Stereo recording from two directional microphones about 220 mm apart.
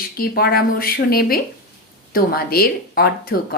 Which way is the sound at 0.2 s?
45° left (ahead or behind).